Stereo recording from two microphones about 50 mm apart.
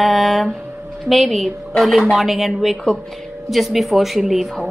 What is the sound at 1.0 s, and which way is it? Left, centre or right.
Speech, centre.